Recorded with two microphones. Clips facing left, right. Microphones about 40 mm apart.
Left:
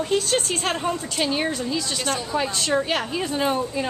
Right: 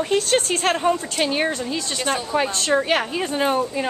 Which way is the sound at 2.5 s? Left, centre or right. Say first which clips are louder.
Right 2 dB; centre.